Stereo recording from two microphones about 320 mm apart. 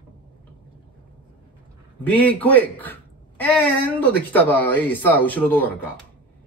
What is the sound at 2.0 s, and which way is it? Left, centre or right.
Speech, centre.